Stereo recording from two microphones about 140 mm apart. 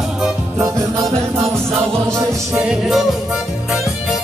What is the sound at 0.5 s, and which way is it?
Music, 20° right (ahead or behind).